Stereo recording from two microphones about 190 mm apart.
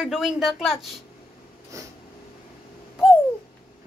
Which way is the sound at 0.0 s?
Centre (ahead or behind).